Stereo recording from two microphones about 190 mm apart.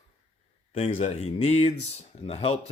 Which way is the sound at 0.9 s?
35° left (ahead or behind).